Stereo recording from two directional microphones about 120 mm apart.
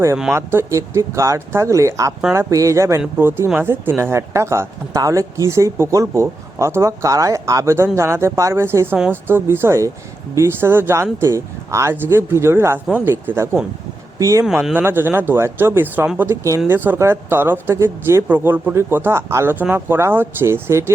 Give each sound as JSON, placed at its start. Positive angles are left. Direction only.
{"t": 0.3, "sound": "speech", "side_deg": -25}
{"t": 14.6, "sound": "speech", "side_deg": -15}